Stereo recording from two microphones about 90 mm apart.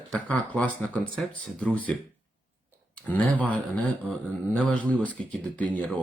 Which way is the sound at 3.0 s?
15° left (ahead or behind).